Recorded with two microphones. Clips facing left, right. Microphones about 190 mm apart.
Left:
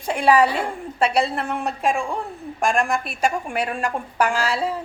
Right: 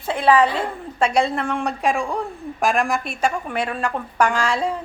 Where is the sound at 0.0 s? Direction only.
10° left (ahead or behind).